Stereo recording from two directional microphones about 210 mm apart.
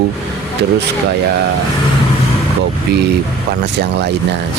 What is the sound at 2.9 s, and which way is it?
Speech, 50° right (ahead or behind).